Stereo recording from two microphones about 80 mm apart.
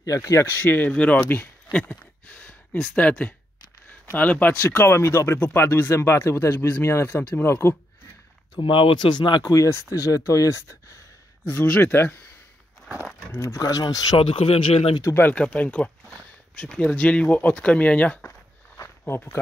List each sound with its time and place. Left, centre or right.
0.0 s speech: left
0.5 s speech: left
1.3 s a sound: left
3.0 s speech: centre
8.5 s speech: left
9.5 s speech: left
11.4 s speech: left
13.3 s speech: left
13.6 s speech: left
15.3 s speech: centre
18.8 s a sound: left